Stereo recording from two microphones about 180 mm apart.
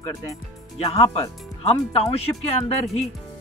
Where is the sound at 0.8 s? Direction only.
35° left (ahead or behind).